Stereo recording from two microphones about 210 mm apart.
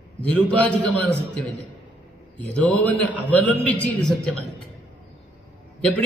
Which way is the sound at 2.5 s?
5° left (ahead or behind).